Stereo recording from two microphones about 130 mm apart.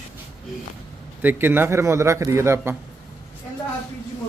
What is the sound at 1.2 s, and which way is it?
Speech, 15° right (ahead or behind).